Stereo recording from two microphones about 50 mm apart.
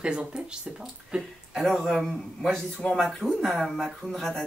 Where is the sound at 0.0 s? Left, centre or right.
Right.